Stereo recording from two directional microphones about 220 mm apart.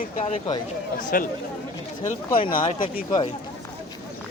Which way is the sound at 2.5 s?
40° left (ahead or behind).